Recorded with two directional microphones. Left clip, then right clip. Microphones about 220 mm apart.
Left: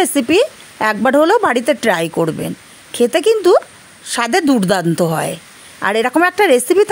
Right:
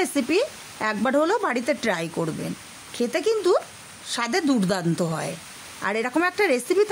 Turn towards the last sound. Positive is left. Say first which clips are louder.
# left 10 dB
turn(degrees=30)  # may be behind; listen again after turning